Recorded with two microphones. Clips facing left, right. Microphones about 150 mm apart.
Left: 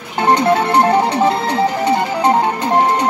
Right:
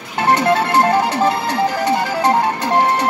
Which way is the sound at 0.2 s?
20° left (ahead or behind).